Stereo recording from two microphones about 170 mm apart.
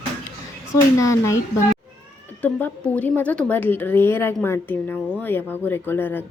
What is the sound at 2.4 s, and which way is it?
A woman's voice, 10° left (ahead or behind).